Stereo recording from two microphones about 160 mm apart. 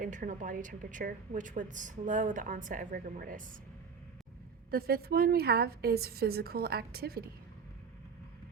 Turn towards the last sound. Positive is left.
turn(degrees=-75)  # may be behind; listen again after turning